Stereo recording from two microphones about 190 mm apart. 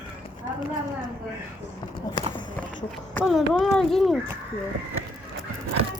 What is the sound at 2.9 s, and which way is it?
Speech, centre (ahead or behind).